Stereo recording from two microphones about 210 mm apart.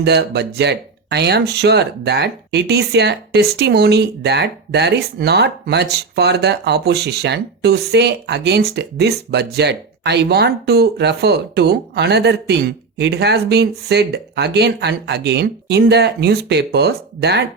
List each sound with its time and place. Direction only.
0.0 s speech: 50° right (ahead or behind)